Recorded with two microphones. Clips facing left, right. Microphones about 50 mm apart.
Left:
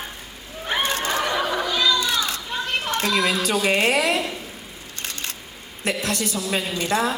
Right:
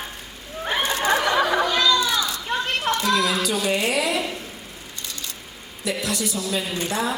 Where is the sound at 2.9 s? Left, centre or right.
Right.